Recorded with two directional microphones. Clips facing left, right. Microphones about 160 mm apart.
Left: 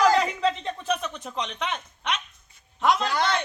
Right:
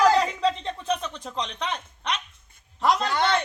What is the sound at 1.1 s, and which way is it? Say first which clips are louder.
Speech: even; 5° left (ahead or behind).